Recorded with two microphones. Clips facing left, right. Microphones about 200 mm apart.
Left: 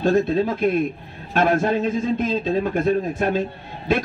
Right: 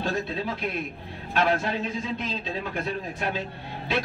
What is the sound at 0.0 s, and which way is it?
A man's voice, 50° left (ahead or behind).